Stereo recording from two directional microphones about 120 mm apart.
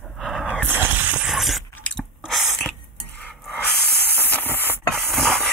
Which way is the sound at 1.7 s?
10° left (ahead or behind).